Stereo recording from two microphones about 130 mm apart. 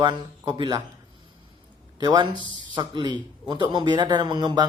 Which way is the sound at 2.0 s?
35° right (ahead or behind).